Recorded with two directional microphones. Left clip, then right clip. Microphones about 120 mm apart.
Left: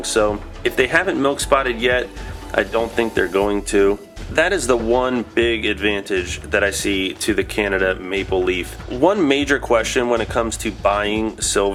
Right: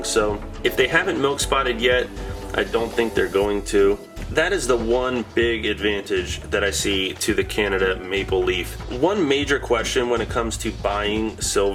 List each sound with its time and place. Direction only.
0.0 s speech: 40° left (ahead or behind)